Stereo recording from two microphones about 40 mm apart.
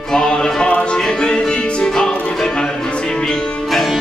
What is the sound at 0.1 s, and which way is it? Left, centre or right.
Music, centre.